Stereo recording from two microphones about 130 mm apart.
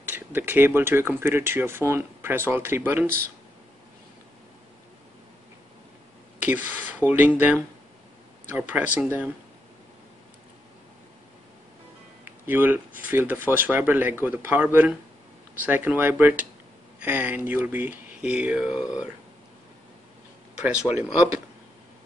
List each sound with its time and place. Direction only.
0.0 s speech: 15° right (ahead or behind)
6.4 s speech: 15° right (ahead or behind)
12.3 s speech: 15° right (ahead or behind)
20.5 s speech: 10° right (ahead or behind)